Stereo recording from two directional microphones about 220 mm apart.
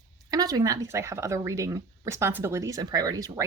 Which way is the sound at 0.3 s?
15° right (ahead or behind).